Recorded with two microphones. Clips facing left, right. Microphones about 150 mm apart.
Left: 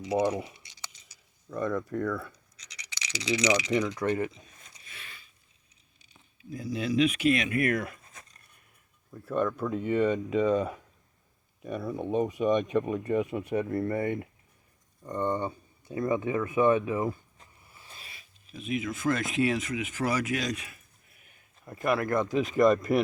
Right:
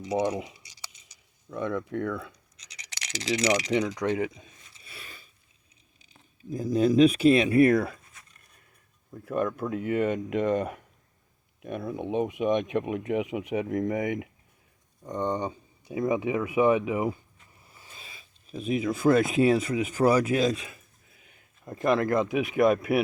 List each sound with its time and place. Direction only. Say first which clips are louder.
0.2 s speech: even; 15° right (ahead or behind)
1.5 s speech: even; centre (ahead or behind)
2.7 s a sound: right 1 dB; 50° right (ahead or behind)
3.9 s speech: right 1 dB; 20° right (ahead or behind)
4.9 s a sound: right 4 dB; 40° right (ahead or behind)
6.1 s speech: right 6 dB; 40° right (ahead or behind)
9.2 s speech: even; 5° right (ahead or behind)
11.9 s speech: even; 5° right (ahead or behind)
17.7 s a sound: right 2 dB; 20° right (ahead or behind)
18.4 s speech: right 5 dB; 35° right (ahead or behind)
22.3 s speech: even; 65° right (ahead or behind)
22.6 s speech: even; 5° right (ahead or behind)